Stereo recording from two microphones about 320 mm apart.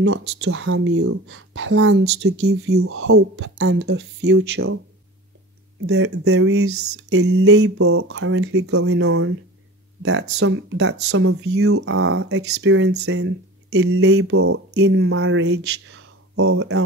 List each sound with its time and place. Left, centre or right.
0.4 s speech: right
5.9 s speech: right
10.4 s speech: right